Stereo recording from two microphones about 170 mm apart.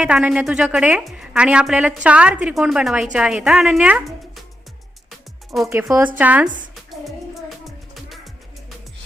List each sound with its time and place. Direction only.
0.0 s a woman's voice: 5° right (ahead or behind)
5.6 s speech: 15° right (ahead or behind)